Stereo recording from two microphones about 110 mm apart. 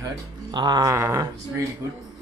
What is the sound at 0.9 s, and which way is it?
Speech, 25° right (ahead or behind).